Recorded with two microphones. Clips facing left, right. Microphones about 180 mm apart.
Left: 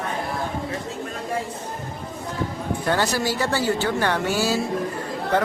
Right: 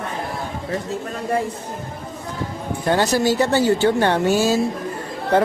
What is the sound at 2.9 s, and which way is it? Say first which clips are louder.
Speech: right 6 dB; 20° right (ahead or behind).